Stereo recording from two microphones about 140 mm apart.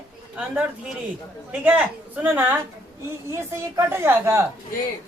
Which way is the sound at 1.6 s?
10° right (ahead or behind).